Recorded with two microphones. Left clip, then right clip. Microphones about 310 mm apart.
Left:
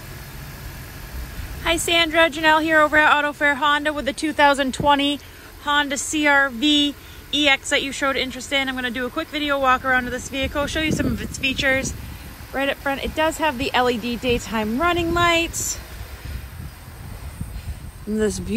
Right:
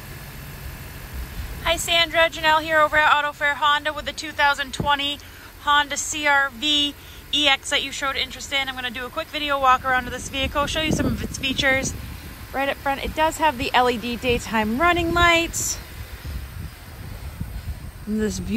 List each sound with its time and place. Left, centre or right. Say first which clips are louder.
1.6 s speech: left 1 dB; centre